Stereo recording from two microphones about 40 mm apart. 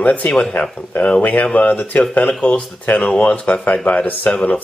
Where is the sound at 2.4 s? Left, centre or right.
Left.